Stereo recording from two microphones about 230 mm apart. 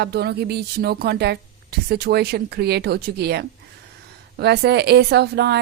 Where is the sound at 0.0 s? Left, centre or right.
Right.